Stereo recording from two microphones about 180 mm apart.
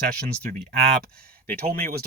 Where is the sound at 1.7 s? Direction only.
55° right (ahead or behind).